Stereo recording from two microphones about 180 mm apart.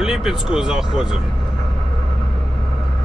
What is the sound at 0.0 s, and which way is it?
Speech, centre (ahead or behind).